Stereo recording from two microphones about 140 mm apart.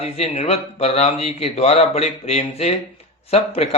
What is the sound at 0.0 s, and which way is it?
Speech, 50° left (ahead or behind).